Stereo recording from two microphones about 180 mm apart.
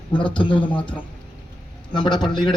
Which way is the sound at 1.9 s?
25° left (ahead or behind).